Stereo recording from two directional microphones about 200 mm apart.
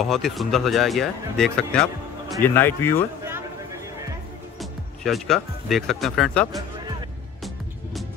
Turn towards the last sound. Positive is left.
turn(degrees=0)  # may be behind; listen again after turning